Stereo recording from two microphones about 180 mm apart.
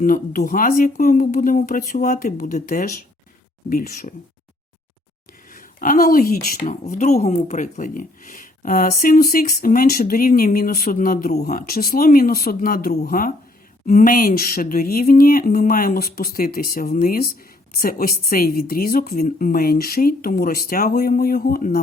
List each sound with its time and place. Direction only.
0.0 s speech: 50° left (ahead or behind)
5.5 s a woman's voice: 50° left (ahead or behind)